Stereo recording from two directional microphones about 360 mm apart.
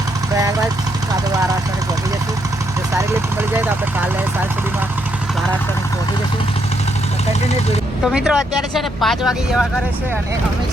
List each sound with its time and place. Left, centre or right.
0.3 s vehicle: centre
8.0 s speech: centre